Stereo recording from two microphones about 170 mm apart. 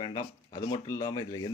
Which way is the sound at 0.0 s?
25° left (ahead or behind).